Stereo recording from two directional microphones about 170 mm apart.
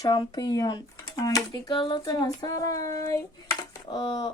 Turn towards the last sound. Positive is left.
turn(degrees=25)  # may be behind; listen again after turning